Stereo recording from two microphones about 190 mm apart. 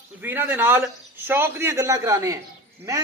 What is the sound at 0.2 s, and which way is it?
A man's voice, 10° right (ahead or behind).